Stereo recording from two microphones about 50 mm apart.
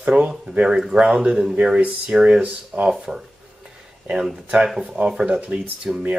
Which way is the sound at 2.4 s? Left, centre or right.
Right.